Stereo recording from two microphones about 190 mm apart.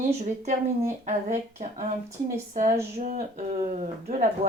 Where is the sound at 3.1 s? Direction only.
45° right (ahead or behind).